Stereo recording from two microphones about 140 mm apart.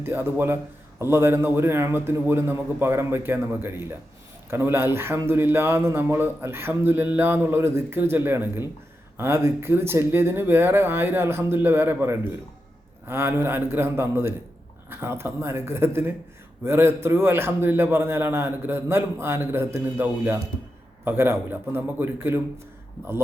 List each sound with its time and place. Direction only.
0.0 s a man's voice: 15° right (ahead or behind)